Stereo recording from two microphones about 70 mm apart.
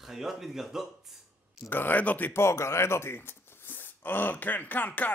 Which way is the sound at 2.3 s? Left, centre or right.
Left.